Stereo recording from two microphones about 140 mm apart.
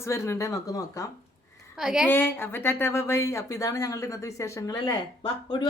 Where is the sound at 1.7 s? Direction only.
5° right (ahead or behind).